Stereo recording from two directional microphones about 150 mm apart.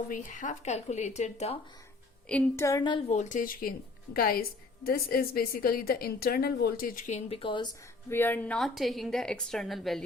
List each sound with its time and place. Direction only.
0.1 s speech: 60° left (ahead or behind)
2.3 s a sound: 20° left (ahead or behind)
3.1 s a woman's voice: 55° left (ahead or behind); by 7.7 s 35° left (ahead or behind)
8.1 s a woman's voice: 15° left (ahead or behind)